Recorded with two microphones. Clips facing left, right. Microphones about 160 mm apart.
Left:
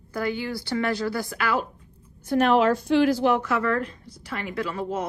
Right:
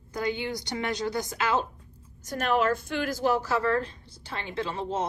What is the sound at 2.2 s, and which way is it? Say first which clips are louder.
A woman's voice: left 6 dB; 45° right (ahead or behind).